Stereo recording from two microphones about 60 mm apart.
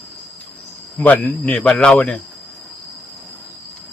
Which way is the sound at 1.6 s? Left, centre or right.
Centre.